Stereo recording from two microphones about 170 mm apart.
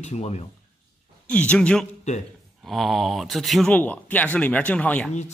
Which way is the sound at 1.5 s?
5° left (ahead or behind).